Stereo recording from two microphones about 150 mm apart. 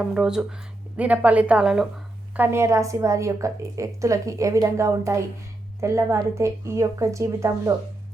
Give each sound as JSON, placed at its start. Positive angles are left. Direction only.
{"t": 0.0, "sound": "a woman's voice", "side_deg": -5}
{"t": 2.3, "sound": "a woman's voice", "side_deg": -15}